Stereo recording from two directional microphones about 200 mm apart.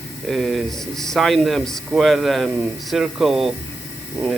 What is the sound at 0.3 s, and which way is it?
Speech, centre (ahead or behind).